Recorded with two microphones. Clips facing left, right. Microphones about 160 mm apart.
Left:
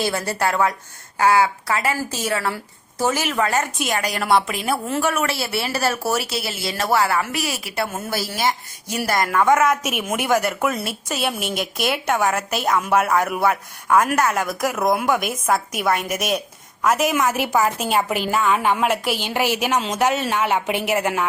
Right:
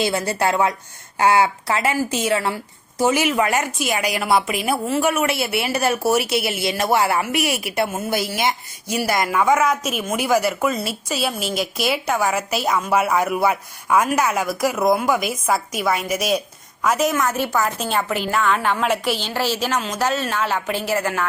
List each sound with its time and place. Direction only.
0.0 s a woman's voice: 20° right (ahead or behind); by 17.2 s centre (ahead or behind)
17.2 s a woman's voice: 10° left (ahead or behind)